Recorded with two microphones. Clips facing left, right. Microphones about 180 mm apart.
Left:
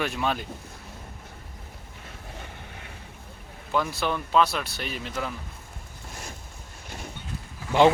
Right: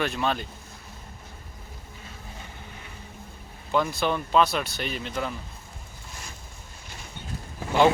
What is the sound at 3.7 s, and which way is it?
Speech, centre (ahead or behind).